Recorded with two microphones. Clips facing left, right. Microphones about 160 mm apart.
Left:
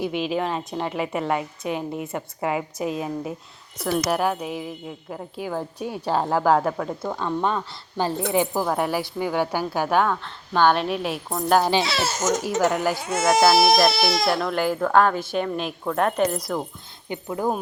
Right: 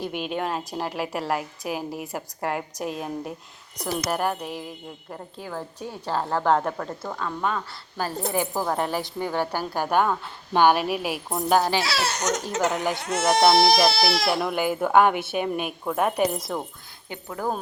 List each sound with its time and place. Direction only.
0.1 s speech: centre (ahead or behind)
5.4 s speech: 15° left (ahead or behind)
6.4 s speech: 5° left (ahead or behind)
7.2 s a woman's voice: 25° left (ahead or behind)
8.6 s speech: 5° left (ahead or behind)
9.9 s a woman's voice: 5° right (ahead or behind)
11.6 s a woman's voice: 20° left (ahead or behind)
11.9 s a woman's voice: centre (ahead or behind)
17.1 s speech: 15° left (ahead or behind)